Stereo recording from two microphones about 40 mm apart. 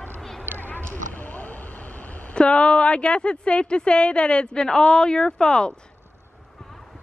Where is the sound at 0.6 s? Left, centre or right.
Left.